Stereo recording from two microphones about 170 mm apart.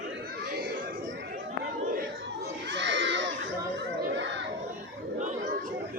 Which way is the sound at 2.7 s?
90° right.